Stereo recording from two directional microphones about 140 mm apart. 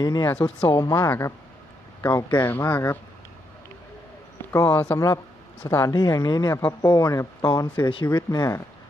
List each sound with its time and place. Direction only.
0.0 s speech: 25° left (ahead or behind)
0.7 s speech: 25° left (ahead or behind)
4.5 s speech: 15° left (ahead or behind)